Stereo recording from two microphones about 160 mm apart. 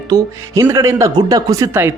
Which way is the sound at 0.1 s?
20° right (ahead or behind).